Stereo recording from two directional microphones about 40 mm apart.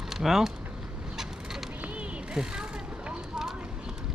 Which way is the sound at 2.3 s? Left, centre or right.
Centre.